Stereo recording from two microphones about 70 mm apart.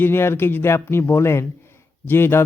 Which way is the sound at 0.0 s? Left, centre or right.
Left.